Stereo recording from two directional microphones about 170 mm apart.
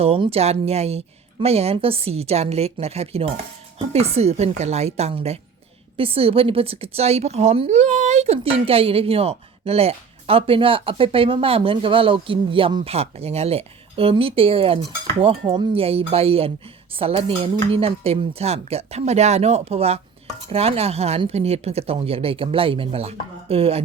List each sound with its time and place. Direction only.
0.0 s speech: 35° right (ahead or behind)